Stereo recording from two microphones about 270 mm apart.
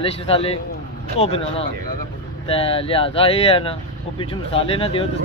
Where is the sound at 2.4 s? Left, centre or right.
Left.